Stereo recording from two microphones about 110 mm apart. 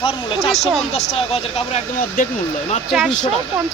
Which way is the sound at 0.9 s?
70° left (ahead or behind).